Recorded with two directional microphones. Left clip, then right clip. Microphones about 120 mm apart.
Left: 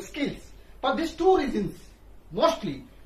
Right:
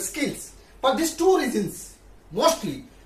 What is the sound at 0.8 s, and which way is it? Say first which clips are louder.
Speech: right 4 dB; 25° right (ahead or behind).